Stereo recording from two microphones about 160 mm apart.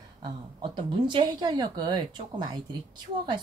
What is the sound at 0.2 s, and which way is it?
Speech, 30° right (ahead or behind).